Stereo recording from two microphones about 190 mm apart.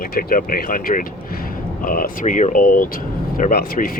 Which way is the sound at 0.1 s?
50° left (ahead or behind).